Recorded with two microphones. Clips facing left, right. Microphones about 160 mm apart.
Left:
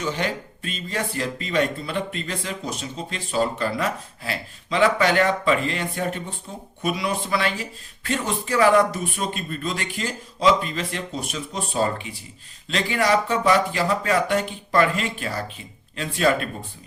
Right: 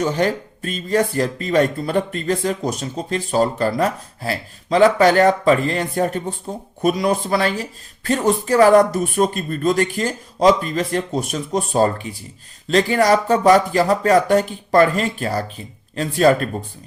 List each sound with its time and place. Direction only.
0.0 s speech: 45° right (ahead or behind)